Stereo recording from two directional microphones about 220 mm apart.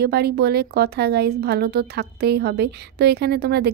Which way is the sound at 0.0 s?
45° right (ahead or behind).